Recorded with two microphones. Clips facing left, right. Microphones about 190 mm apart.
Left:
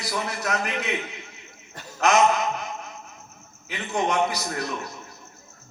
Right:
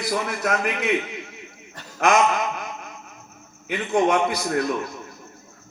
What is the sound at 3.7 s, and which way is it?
A man's voice, 55° right (ahead or behind).